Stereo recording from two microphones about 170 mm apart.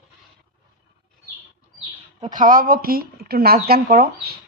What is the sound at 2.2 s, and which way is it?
Speech, 50° right (ahead or behind).